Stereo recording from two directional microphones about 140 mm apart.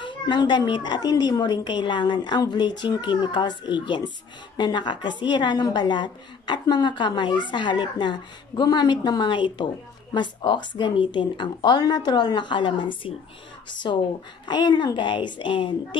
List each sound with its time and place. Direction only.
0.0 s a woman's voice: 35° left (ahead or behind)